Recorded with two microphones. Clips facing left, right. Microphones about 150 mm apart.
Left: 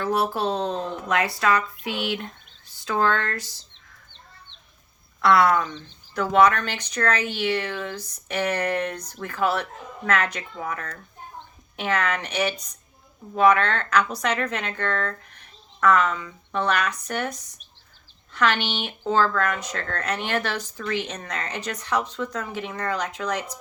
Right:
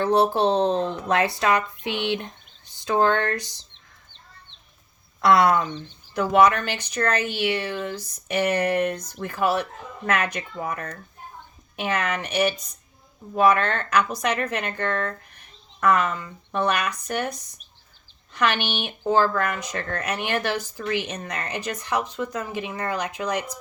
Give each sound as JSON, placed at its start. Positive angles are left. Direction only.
{"t": 0.0, "sound": "speech", "side_deg": -25}
{"t": 5.2, "sound": "speech", "side_deg": -20}
{"t": 5.7, "sound": "speech", "side_deg": -10}